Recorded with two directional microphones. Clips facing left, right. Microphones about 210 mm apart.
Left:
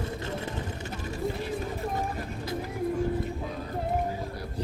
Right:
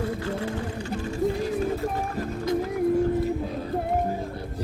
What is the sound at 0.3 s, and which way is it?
Vehicle, 20° left (ahead or behind).